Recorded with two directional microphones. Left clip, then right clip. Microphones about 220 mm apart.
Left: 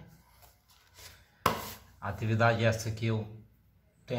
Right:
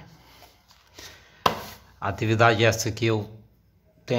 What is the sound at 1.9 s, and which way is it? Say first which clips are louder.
A man's voice: right 10 dB; 45° right (ahead or behind).